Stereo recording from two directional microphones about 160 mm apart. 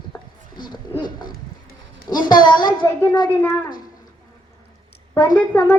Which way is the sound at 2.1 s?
25° left (ahead or behind).